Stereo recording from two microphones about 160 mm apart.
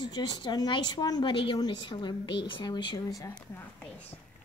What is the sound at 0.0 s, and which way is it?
Speech, 25° left (ahead or behind).